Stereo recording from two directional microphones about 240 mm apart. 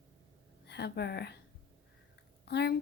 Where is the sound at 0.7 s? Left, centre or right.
Left.